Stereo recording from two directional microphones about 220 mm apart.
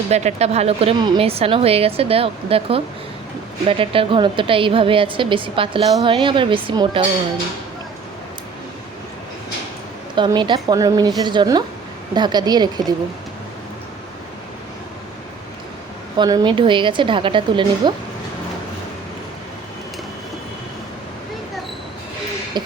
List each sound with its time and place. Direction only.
0.1 s a woman's voice: 30° right (ahead or behind)
10.2 s a woman's voice: 20° right (ahead or behind)
16.1 s a woman's voice: 20° right (ahead or behind)
22.5 s speech: 20° right (ahead or behind)